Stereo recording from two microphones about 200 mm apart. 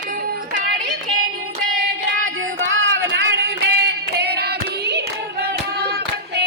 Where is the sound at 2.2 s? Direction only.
85° right.